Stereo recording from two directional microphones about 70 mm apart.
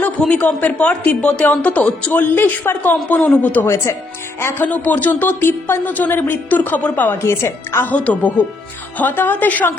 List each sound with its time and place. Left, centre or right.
0.2 s speech: centre
2.2 s speech: left
3.9 s speech: left
7.2 s speech: left
7.9 s speech: left